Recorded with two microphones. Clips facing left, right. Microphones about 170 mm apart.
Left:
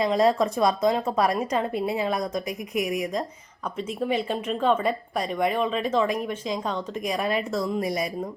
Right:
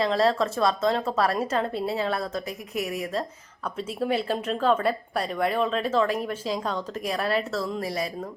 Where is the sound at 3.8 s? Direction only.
5° right (ahead or behind).